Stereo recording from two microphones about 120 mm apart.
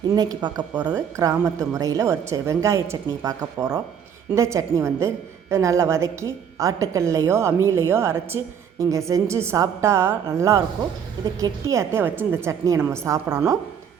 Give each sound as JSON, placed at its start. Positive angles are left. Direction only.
{"t": 0.1, "sound": "a woman's voice", "side_deg": -35}